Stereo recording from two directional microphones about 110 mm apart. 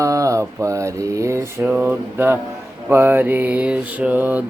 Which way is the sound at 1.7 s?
20° right (ahead or behind).